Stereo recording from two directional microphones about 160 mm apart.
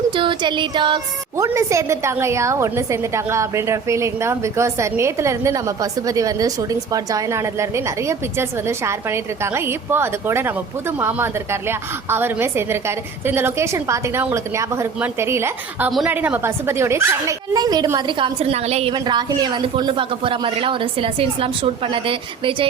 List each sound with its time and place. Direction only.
0.1 s a woman's voice: 30° right (ahead or behind); by 15.9 s 15° right (ahead or behind)
15.9 s a woman's voice: centre (ahead or behind)
16.1 s speech: 10° right (ahead or behind); by 18.9 s 40° right (ahead or behind)
18.9 s speech: 25° right (ahead or behind)